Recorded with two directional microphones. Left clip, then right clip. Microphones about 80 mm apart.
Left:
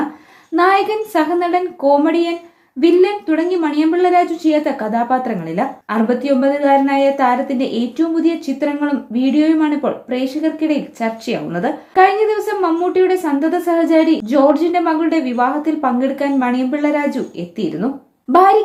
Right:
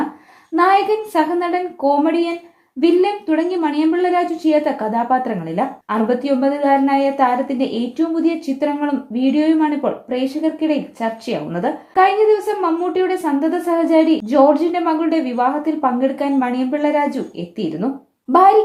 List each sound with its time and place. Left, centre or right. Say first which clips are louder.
0.5 s a woman's voice: left 1 dB; right